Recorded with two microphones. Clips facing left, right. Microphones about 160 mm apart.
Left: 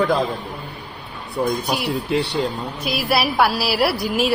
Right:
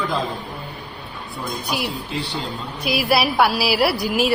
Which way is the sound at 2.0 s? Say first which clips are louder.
Left 7 dB; 70° left (ahead or behind).